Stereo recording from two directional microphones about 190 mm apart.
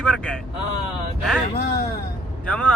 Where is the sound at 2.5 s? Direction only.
5° left (ahead or behind).